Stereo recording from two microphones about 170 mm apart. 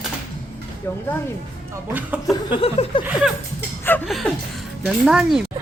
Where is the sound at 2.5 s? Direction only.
30° left (ahead or behind).